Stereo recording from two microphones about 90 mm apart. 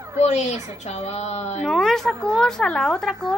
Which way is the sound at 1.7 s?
5° left (ahead or behind).